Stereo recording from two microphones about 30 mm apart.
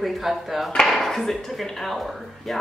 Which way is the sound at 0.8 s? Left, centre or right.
Centre.